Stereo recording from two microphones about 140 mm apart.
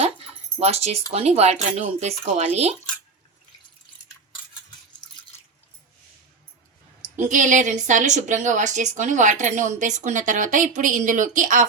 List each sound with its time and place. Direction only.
0.6 s speech: 50° right (ahead or behind)
7.0 s a woman's voice: 60° right (ahead or behind)